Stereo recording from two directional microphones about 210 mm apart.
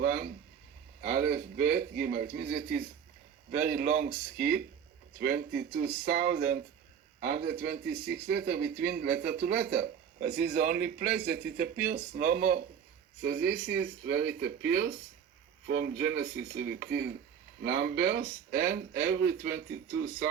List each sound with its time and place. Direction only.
0.0 s speech: 45° right (ahead or behind)
5.2 s speech: 50° right (ahead or behind)
18.5 s speech: 10° right (ahead or behind)
19.1 s speech: 50° right (ahead or behind)